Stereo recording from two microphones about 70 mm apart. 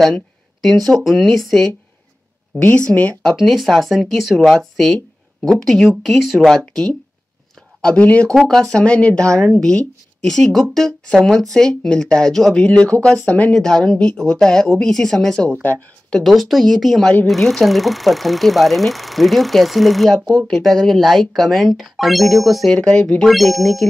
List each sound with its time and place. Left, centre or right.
0.6 s speech: centre
2.6 s speech: centre
3.3 s speech: centre
6.6 s speech: centre
8.5 s speech: centre
20.2 s speech: centre
20.5 s speech: centre
22.7 s speech: centre
23.2 s speech: centre